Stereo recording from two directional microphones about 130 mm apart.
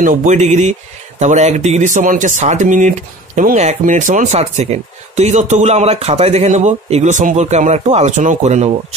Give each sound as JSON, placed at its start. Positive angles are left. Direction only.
{"t": 0.0, "sound": "speech", "side_deg": -85}